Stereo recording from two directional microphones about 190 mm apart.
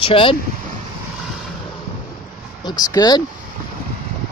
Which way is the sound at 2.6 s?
20° left (ahead or behind).